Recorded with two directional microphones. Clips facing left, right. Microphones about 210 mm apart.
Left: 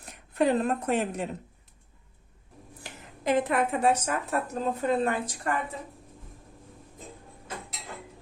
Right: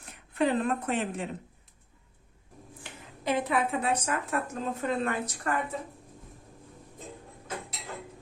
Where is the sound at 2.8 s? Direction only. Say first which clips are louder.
Left 3 dB; 45° left (ahead or behind).